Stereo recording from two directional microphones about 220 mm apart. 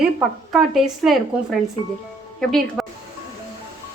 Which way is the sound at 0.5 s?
Centre (ahead or behind).